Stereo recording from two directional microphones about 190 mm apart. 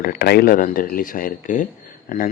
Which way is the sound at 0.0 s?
55° left (ahead or behind).